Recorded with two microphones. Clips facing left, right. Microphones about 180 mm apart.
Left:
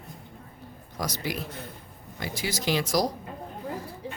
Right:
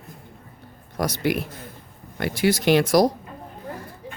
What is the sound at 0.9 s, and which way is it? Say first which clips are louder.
Speech: right 8 dB; 60° right (ahead or behind).